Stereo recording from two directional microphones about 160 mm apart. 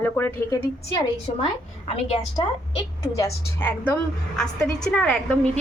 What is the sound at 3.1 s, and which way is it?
A woman's voice, 15° left (ahead or behind).